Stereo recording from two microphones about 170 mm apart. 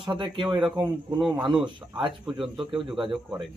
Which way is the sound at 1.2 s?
5° right (ahead or behind).